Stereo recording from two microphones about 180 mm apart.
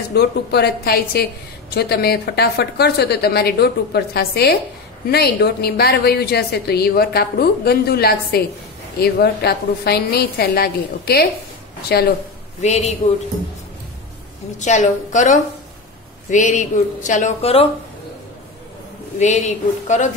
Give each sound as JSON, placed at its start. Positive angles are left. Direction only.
{"t": 0.1, "sound": "a woman's voice", "side_deg": 65}
{"t": 12.6, "sound": "a woman's voice", "side_deg": 40}
{"t": 14.6, "sound": "a woman's voice", "side_deg": 40}
{"t": 19.1, "sound": "a woman's voice", "side_deg": 40}